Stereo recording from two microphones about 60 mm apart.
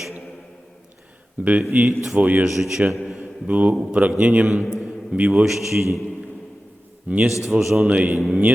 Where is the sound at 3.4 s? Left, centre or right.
Right.